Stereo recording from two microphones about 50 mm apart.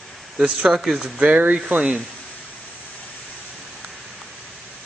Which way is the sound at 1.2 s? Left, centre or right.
Right.